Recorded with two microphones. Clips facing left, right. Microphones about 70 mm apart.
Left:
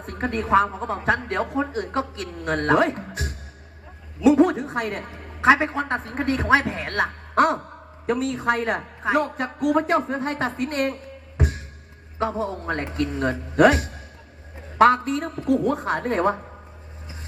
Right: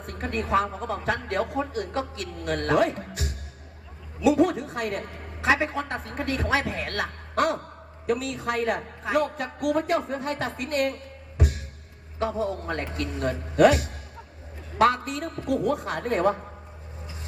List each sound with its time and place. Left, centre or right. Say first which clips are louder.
0.0 s a woman's voice: left 4 dB; left
11.3 s music: left 2 dB; left
12.2 s a woman's voice: left 2 dB; left